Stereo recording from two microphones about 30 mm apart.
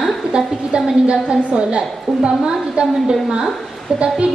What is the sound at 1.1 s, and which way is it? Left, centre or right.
A woman's voice, right.